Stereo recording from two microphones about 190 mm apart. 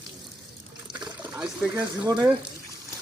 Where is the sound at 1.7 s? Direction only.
20° right (ahead or behind).